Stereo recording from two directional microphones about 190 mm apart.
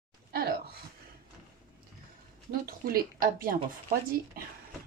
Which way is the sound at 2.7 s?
50° right (ahead or behind).